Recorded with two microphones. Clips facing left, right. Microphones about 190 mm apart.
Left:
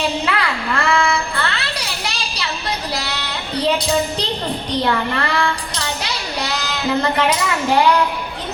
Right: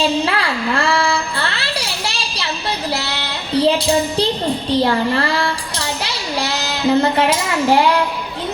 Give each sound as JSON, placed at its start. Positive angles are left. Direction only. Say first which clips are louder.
{"t": 0.3, "sound": "child singing", "louder": "right 2 dB", "side_deg": -30}
{"t": 4.8, "sound": "a child's voice", "louder": "right 2 dB", "side_deg": -30}